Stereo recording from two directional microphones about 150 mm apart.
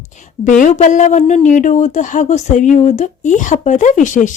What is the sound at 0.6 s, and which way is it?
A woman's voice, 55° left (ahead or behind).